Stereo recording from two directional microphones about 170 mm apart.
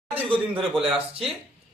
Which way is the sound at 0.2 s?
30° right (ahead or behind).